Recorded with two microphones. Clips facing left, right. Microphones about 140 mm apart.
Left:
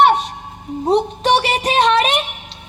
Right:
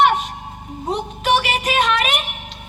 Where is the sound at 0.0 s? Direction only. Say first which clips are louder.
Left 3 dB; 35° left (ahead or behind).